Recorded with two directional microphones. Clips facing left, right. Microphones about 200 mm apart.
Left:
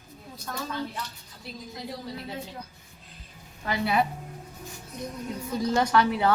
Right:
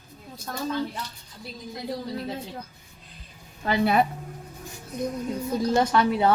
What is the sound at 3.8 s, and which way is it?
Speech, 50° right (ahead or behind).